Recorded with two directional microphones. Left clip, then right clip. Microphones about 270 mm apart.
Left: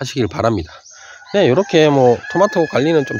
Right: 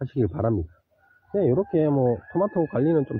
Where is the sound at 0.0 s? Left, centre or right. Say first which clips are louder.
Left 8 dB; centre.